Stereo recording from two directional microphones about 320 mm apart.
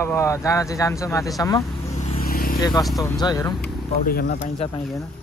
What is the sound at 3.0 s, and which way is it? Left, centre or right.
Speech, centre.